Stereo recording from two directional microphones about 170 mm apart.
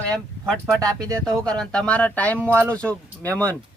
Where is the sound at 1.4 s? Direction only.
5° left (ahead or behind).